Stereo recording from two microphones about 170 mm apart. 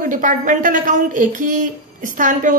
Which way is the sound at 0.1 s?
50° right (ahead or behind).